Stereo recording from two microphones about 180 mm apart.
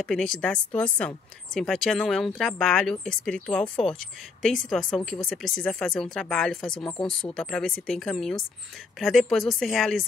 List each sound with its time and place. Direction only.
0.0 s speech: 5° left (ahead or behind)